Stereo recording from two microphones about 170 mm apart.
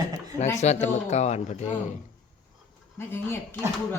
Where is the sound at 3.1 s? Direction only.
15° left (ahead or behind).